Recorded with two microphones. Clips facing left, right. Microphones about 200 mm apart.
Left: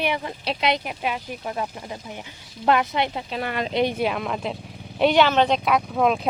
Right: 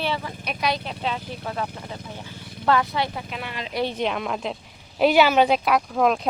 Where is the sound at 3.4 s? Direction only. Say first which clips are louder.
Left 11 dB; 55° left (ahead or behind).